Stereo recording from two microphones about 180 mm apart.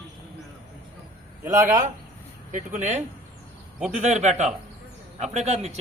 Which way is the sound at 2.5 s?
45° right (ahead or behind).